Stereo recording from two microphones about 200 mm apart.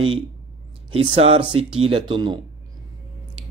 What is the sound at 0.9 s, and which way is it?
Speech, 30° right (ahead or behind).